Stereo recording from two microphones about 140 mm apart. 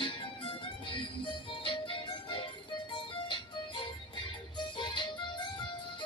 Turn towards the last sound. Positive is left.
turn(degrees=35)  # may be behind; listen again after turning